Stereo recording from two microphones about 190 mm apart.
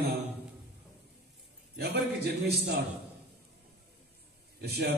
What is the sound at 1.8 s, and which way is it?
Speech, 60° right (ahead or behind).